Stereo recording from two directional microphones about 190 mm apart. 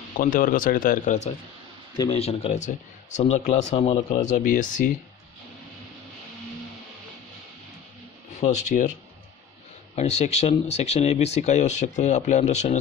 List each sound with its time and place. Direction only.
0.2 s speech: 50° left (ahead or behind)
8.4 s speech: 40° left (ahead or behind)
9.9 s speech: 35° left (ahead or behind)